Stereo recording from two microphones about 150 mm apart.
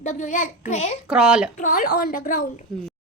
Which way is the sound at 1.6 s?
70° left (ahead or behind).